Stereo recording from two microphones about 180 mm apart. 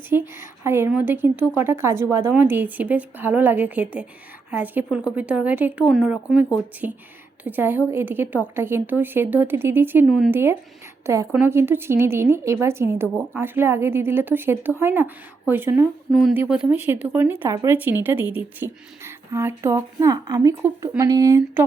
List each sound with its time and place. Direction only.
0.1 s a woman's voice: 15° right (ahead or behind)
7.4 s a woman's voice: 10° right (ahead or behind)
10.1 s a woman's voice: centre (ahead or behind)
10.3 s a woman's voice: 10° right (ahead or behind)